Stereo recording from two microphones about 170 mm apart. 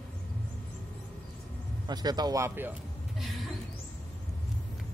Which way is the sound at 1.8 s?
25° right (ahead or behind).